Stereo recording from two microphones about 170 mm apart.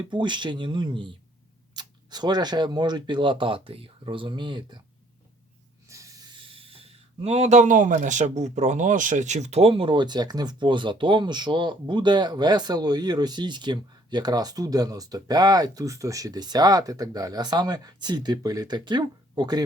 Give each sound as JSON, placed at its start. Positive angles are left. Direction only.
{"t": 0.0, "sound": "speech", "side_deg": -25}
{"t": 5.9, "sound": "speech", "side_deg": -20}